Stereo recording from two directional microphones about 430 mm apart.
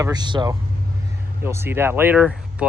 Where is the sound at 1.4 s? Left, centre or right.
Centre.